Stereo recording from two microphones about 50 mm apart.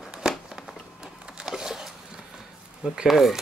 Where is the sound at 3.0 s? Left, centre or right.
Centre.